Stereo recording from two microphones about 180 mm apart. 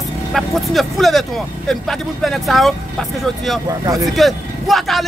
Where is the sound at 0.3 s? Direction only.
Centre (ahead or behind).